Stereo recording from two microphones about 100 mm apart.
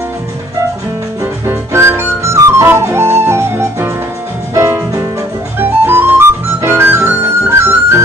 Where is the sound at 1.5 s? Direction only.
25° right (ahead or behind).